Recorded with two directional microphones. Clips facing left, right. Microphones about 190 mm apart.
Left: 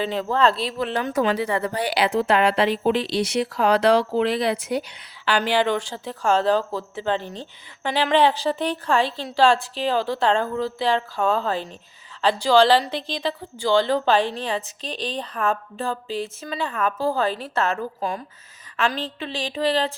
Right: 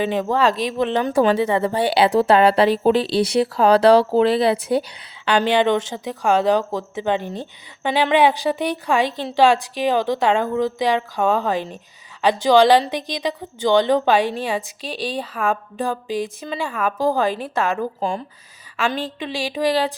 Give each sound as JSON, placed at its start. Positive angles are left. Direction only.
{"t": 0.0, "sound": "a woman's voice", "side_deg": -15}
{"t": 5.4, "sound": "a woman's voice", "side_deg": -20}
{"t": 18.9, "sound": "a woman's voice", "side_deg": -15}